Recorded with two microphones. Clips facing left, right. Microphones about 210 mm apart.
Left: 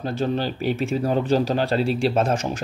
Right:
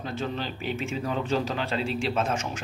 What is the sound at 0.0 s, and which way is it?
Speech, 35° left (ahead or behind).